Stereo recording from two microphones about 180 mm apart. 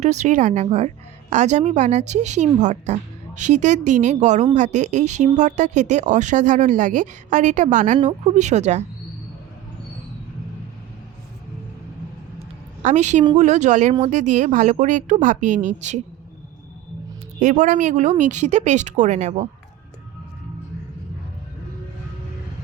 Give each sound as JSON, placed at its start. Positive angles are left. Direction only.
{"t": 0.0, "sound": "speech", "side_deg": -40}
{"t": 12.8, "sound": "a woman's voice", "side_deg": -40}
{"t": 17.4, "sound": "speech", "side_deg": -45}